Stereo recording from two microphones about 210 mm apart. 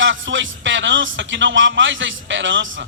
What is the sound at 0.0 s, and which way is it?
A man's voice, 60° right (ahead or behind).